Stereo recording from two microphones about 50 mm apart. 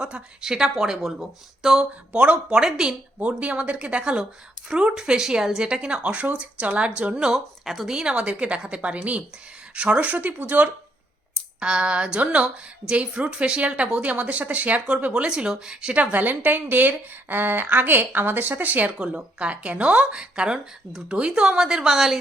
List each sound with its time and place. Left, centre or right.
0.0 s speech: centre
2.1 s a woman's voice: right
2.6 s speech: centre
3.2 s a woman's voice: right
7.3 s speech: centre
7.9 s a woman's voice: right
10.2 s a woman's voice: right
11.6 s a woman's voice: centre
16.1 s a woman's voice: right
18.9 s a woman's voice: right